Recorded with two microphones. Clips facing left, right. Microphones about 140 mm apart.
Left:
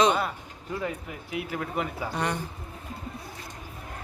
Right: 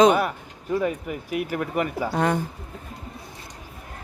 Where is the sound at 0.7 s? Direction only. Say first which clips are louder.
Right 8 dB; 65° right (ahead or behind).